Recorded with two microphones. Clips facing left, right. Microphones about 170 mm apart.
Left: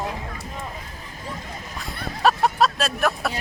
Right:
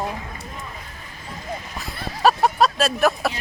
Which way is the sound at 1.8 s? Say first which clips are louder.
Right 2 dB; centre (ahead or behind).